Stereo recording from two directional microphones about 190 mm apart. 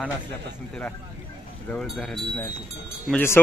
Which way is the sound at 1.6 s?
5° left (ahead or behind).